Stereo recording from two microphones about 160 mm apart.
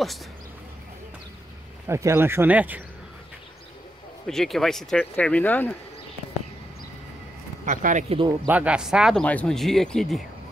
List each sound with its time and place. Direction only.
1.9 s speech: 15° right (ahead or behind)
4.3 s speech: 5° left (ahead or behind)
7.6 s speech: 50° right (ahead or behind)
8.5 s speech: 10° right (ahead or behind)
9.2 s speech: 10° left (ahead or behind)